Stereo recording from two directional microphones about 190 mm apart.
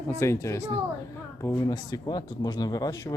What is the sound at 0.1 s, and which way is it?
Speech, 15° left (ahead or behind).